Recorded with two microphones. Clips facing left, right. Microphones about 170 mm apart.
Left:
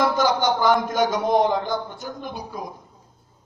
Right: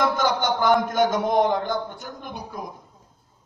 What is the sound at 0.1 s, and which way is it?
A man's voice, 55° right (ahead or behind).